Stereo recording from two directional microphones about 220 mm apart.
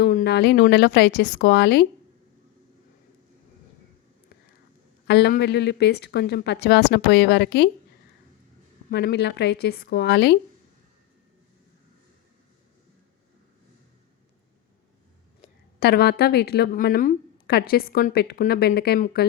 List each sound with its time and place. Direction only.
0.0 s a woman's voice: 40° left (ahead or behind)
5.0 s a woman's voice: 50° left (ahead or behind)
8.9 s a woman's voice: 50° left (ahead or behind)
15.8 s a woman's voice: 45° left (ahead or behind)